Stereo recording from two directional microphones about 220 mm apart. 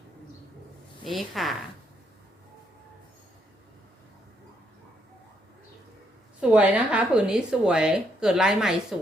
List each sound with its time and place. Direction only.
1.0 s speech: centre (ahead or behind)
6.4 s speech: 5° right (ahead or behind)